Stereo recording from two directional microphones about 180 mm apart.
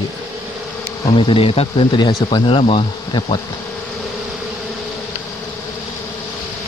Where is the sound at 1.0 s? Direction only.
30° left (ahead or behind).